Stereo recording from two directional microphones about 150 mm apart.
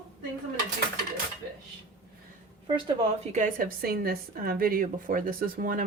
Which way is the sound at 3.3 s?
60° right (ahead or behind).